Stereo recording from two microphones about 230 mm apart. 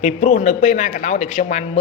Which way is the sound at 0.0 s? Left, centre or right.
Left.